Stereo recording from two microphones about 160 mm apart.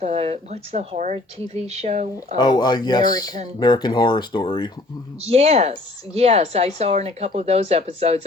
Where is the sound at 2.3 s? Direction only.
25° left (ahead or behind).